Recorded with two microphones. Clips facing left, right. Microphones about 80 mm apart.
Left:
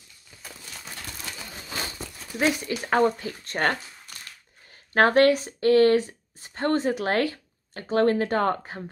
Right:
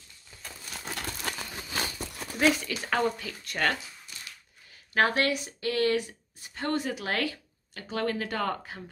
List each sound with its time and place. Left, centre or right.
1.3 s crumpling: right
2.4 s speech: left
4.9 s speech: left